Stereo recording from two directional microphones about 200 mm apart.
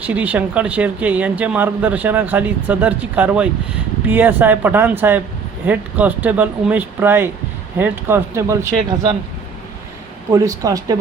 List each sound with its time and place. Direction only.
0.0 s speech: 5° right (ahead or behind)
10.3 s speech: 15° right (ahead or behind)